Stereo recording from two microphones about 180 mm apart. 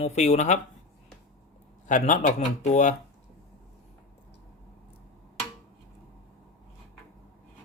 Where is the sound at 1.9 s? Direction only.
45° left (ahead or behind).